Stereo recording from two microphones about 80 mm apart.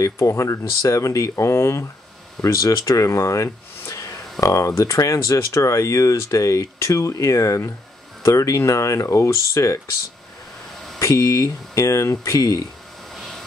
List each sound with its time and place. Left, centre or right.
0.0 s speech: left
11.0 s speech: left
13.1 s vehicle: centre